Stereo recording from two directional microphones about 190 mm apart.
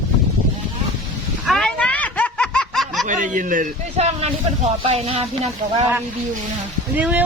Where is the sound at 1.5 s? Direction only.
5° left (ahead or behind).